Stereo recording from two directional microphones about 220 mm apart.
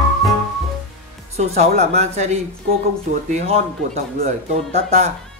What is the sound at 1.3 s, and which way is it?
Speech, 30° right (ahead or behind).